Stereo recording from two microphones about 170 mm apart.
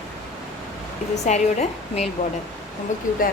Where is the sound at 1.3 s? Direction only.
40° left (ahead or behind).